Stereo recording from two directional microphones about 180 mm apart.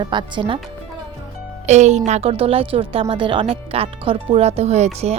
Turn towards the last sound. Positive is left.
turn(degrees=-35)  # may be behind; listen again after turning